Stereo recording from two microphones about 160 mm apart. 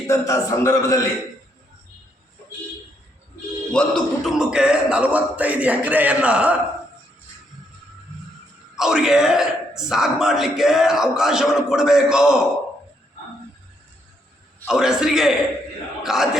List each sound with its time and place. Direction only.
0.1 s a man's voice: 20° left (ahead or behind)
3.7 s a man's voice: 5° left (ahead or behind)
8.7 s speech: 5° right (ahead or behind)
14.7 s speech: 5° right (ahead or behind)